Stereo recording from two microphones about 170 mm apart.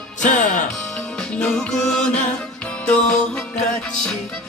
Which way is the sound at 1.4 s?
5° left (ahead or behind).